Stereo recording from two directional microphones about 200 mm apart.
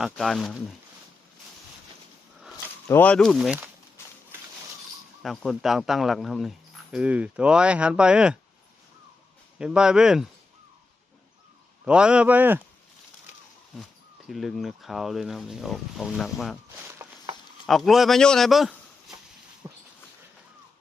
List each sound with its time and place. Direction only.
0.0 s speech: centre (ahead or behind)
2.8 s speech: 10° left (ahead or behind)
5.2 s speech: centre (ahead or behind)
9.6 s speech: 5° right (ahead or behind)
11.9 s speech: 5° right (ahead or behind)
14.3 s speech: centre (ahead or behind)
16.7 s a sound: 15° right (ahead or behind)
17.7 s speech: centre (ahead or behind)
19.6 s a sound: 15° right (ahead or behind)